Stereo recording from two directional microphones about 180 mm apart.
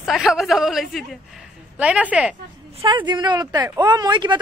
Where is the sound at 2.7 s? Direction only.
25° right (ahead or behind).